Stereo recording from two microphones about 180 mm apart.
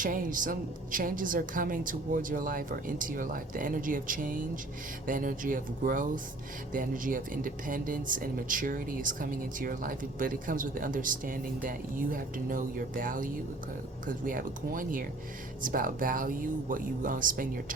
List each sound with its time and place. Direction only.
0.0 s speech: 50° right (ahead or behind)